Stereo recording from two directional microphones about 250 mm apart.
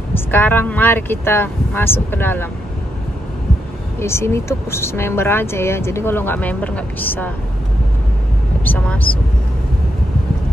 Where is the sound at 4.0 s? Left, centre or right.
Centre.